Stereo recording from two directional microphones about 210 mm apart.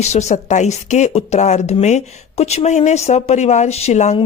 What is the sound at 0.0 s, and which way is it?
A woman's voice, 30° left (ahead or behind).